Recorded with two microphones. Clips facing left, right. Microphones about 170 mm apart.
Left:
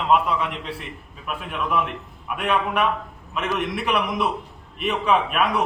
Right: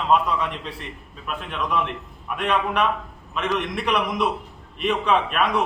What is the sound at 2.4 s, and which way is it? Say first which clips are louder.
A man's voice: even; 5° left (ahead or behind).